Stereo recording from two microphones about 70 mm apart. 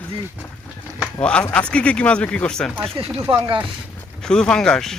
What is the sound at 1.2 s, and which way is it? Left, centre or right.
Speech, centre.